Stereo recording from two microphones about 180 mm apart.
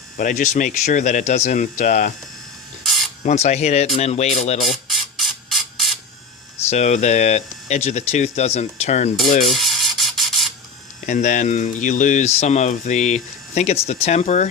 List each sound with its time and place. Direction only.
0.2 s speech: 45° left (ahead or behind)
2.8 s spray: centre (ahead or behind)
3.2 s speech: 40° left (ahead or behind)
4.6 s a sound: centre (ahead or behind)
6.7 s speech: 40° left (ahead or behind)
9.5 s mechanisms: centre (ahead or behind)
11.0 s speech: 45° left (ahead or behind)